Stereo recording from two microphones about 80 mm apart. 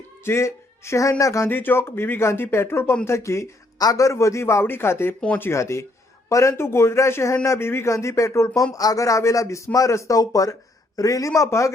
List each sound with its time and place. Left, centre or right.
0.3 s speech: left
1.5 s speech: left
3.8 s speech: left